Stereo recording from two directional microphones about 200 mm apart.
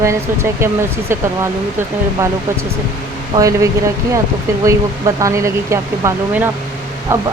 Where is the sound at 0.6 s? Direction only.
10° right (ahead or behind).